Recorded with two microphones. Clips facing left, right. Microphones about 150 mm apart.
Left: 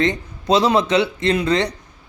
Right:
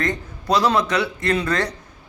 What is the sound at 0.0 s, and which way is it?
A man's voice, 20° left (ahead or behind).